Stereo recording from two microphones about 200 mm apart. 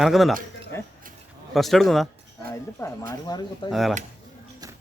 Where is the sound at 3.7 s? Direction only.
Centre (ahead or behind).